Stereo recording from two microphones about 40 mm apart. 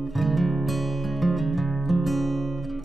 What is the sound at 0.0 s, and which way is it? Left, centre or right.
Music, centre.